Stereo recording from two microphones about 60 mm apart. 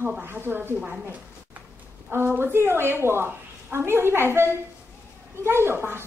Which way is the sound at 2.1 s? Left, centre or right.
Right.